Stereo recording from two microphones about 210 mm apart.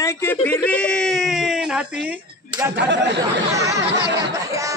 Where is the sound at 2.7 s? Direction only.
55° right (ahead or behind).